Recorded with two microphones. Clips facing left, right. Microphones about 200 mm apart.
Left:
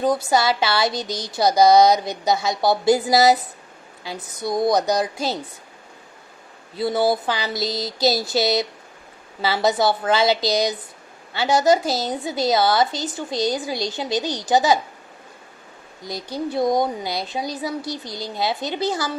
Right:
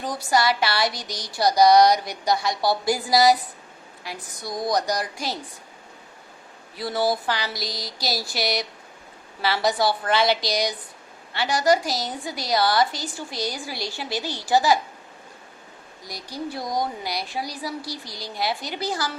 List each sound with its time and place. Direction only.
0.0 s a woman's voice: 25° left (ahead or behind)
6.7 s a woman's voice: 25° left (ahead or behind)
16.0 s a woman's voice: 25° left (ahead or behind)